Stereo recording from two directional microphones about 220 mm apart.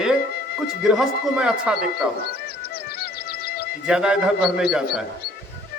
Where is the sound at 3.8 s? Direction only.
5° right (ahead or behind).